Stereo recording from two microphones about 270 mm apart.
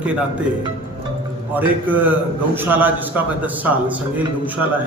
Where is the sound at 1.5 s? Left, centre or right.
Centre.